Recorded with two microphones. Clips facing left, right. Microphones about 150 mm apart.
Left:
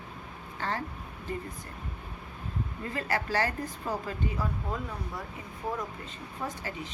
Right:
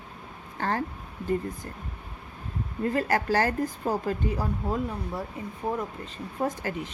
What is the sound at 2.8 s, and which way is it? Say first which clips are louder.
A woman's voice: right 8 dB; 45° right (ahead or behind).